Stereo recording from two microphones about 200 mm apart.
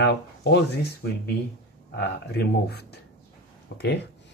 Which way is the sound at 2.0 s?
55° left (ahead or behind).